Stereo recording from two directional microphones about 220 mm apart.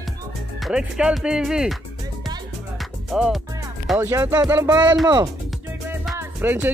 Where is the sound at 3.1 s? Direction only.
Centre (ahead or behind).